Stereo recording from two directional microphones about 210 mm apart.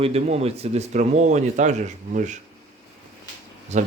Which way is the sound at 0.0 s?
30° right (ahead or behind).